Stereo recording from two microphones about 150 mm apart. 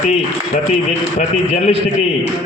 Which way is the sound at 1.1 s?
45° left (ahead or behind).